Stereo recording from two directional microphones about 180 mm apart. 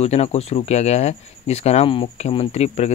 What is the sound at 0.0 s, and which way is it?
Speech, 35° left (ahead or behind).